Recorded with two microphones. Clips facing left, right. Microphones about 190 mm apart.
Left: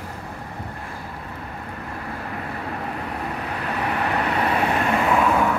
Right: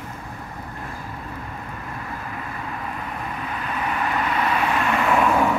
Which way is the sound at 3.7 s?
65° left (ahead or behind).